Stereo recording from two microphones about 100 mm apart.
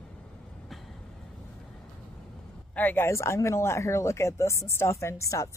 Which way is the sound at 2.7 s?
20° left (ahead or behind).